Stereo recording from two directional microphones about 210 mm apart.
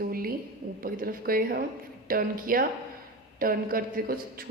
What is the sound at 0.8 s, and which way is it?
A woman's voice, 45° right (ahead or behind).